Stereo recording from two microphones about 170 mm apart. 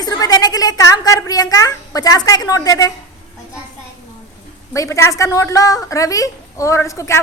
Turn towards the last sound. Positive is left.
turn(degrees=15)  # may be behind; listen again after turning